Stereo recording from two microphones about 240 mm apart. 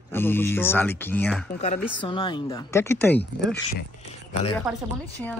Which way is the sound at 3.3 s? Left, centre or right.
Left.